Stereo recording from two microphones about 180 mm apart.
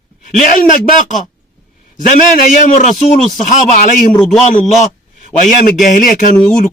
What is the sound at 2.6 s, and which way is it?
A man's voice, 45° left (ahead or behind).